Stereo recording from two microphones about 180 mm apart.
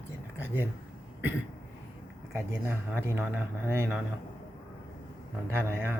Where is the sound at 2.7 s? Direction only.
10° right (ahead or behind).